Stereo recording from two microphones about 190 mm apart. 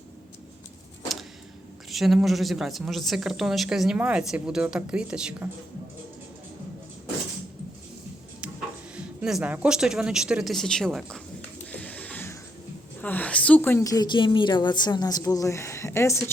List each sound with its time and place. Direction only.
1.9 s a woman's voice: centre (ahead or behind)
9.0 s a woman's voice: 5° right (ahead or behind)
11.7 s a sound: 5° left (ahead or behind)
13.0 s a woman's voice: 10° left (ahead or behind)